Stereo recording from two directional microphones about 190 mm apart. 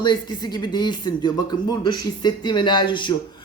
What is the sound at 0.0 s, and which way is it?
Speech, 25° left (ahead or behind).